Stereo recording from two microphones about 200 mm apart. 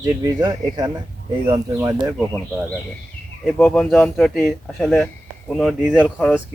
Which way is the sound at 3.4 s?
5° left (ahead or behind).